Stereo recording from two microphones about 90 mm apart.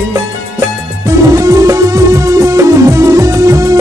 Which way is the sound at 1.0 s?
35° right (ahead or behind).